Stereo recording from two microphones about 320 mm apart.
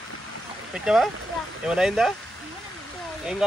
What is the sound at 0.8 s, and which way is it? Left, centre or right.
Speech, centre.